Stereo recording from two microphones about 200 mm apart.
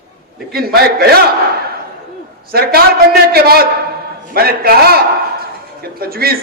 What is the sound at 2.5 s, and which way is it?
A man's voice, 50° right (ahead or behind).